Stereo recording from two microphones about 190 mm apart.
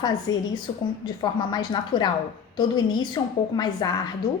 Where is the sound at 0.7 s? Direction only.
25° left (ahead or behind).